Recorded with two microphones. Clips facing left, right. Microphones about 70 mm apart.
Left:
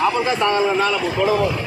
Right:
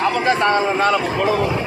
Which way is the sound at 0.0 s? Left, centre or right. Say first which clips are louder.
Right 1 dB; right.